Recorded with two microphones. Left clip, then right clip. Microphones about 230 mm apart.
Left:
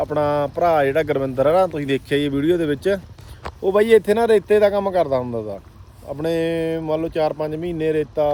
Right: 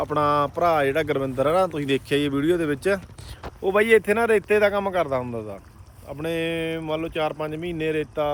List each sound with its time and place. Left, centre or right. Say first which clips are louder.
0.0 s speech: left 2 dB; centre
6.1 s speech: left 5 dB; centre